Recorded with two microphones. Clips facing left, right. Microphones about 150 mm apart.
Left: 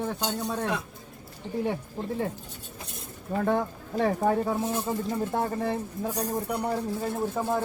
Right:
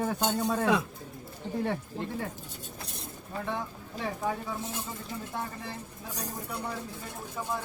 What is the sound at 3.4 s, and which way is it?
Speech, 50° left (ahead or behind).